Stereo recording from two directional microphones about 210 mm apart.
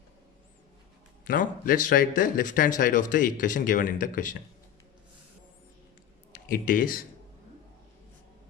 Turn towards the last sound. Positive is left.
turn(degrees=40)  # may be behind; listen again after turning